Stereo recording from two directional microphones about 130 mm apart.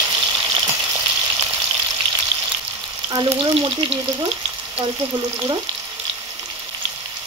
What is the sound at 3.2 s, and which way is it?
Speech, 45° right (ahead or behind).